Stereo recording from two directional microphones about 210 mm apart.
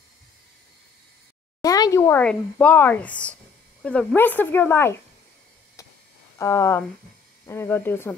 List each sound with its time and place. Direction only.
1.6 s speech: 15° left (ahead or behind)
5.8 s a sound: 15° left (ahead or behind)
6.3 s speech: 15° left (ahead or behind)